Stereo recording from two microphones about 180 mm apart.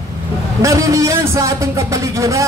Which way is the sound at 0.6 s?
15° right (ahead or behind).